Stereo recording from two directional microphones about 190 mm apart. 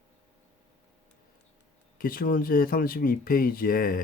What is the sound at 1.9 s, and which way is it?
Speech, 50° left (ahead or behind).